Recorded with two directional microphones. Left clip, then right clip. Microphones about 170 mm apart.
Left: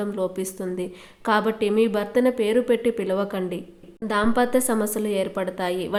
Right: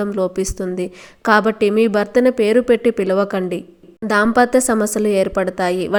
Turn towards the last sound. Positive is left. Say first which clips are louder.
# right 7 dB
turn(degrees=-35)  # may be behind; listen again after turning